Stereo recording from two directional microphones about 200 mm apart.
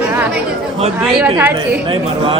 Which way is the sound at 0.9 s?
5° right (ahead or behind).